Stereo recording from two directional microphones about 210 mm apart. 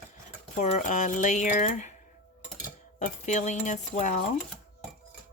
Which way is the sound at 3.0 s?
35° left (ahead or behind).